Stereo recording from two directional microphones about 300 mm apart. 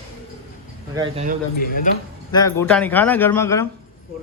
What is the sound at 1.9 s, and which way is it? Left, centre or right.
Speech, left.